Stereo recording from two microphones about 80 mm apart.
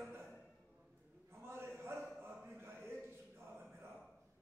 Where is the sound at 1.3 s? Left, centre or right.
Right.